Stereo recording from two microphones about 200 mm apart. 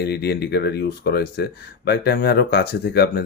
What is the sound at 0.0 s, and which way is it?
Speech, 55° left (ahead or behind).